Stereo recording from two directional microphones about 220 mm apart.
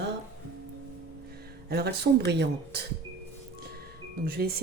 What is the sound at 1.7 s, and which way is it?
A woman's voice, 45° right (ahead or behind).